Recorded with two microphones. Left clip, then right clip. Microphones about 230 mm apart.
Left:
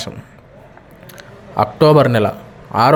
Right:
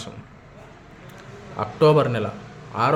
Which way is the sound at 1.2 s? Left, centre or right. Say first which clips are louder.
Left 12 dB; left.